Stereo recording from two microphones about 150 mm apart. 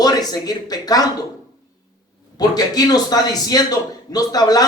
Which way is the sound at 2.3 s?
25° left (ahead or behind).